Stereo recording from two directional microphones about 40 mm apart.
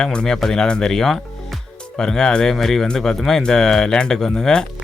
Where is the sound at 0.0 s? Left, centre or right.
Left.